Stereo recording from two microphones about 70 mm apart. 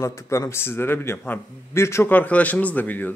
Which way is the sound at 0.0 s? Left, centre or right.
Left.